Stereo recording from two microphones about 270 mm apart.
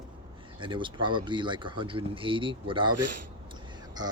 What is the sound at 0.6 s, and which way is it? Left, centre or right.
Speech, centre.